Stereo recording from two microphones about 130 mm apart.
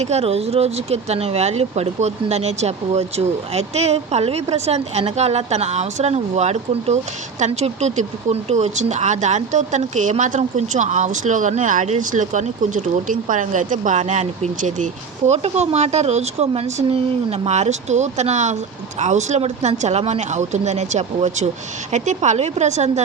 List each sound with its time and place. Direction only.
0.0 s speech: 55° right (ahead or behind)
15.3 s speech: 55° right (ahead or behind)